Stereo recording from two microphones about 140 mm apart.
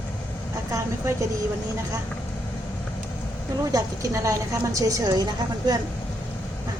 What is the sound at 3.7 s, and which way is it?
A woman's voice, 25° right (ahead or behind).